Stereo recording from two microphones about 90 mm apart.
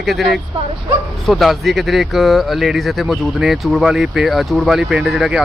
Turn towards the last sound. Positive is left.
turn(degrees=0)  # may be behind; listen again after turning